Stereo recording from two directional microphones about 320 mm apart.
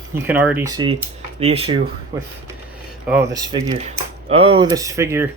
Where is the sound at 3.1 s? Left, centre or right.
Centre.